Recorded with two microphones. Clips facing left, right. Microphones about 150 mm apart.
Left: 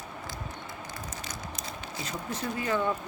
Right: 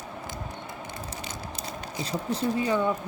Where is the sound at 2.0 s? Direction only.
35° right (ahead or behind).